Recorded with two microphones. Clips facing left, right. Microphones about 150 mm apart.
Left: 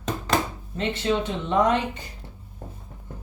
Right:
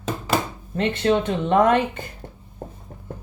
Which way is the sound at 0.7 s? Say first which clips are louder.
Right 5 dB; 60° right (ahead or behind).